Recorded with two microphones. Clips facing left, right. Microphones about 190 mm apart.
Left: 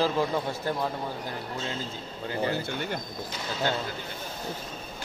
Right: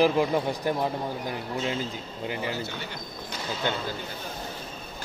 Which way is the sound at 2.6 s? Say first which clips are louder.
Left 3 dB; 50° left (ahead or behind).